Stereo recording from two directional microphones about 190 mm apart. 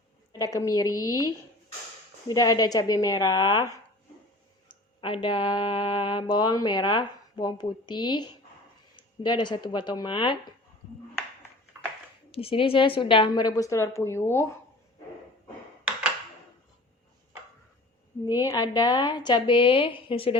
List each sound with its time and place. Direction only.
0.3 s speech: 15° left (ahead or behind)
2.2 s speech: 20° left (ahead or behind)
4.7 s speech: 25° left (ahead or behind)
12.3 s speech: 30° left (ahead or behind); by 14.4 s 15° left (ahead or behind)
18.3 s speech: 20° left (ahead or behind)